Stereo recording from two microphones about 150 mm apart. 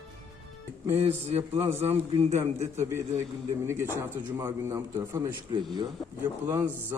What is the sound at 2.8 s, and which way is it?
A man's voice, 15° right (ahead or behind).